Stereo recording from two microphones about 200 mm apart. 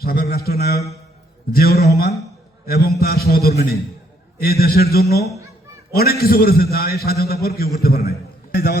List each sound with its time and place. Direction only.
0.0 s a man's voice: 50° left (ahead or behind)